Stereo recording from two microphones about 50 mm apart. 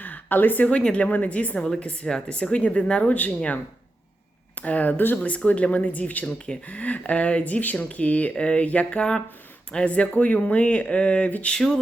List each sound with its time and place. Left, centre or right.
0.0 s a sound: left
0.7 s speech: centre
4.6 s speech: left
6.2 s speech: centre
11.5 s speech: centre